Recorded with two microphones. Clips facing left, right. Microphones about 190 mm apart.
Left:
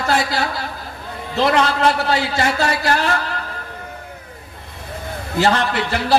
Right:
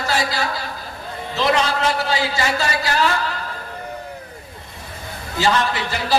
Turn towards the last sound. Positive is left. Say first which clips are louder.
# left 3 dB
turn(degrees=60)  # may be behind; listen again after turning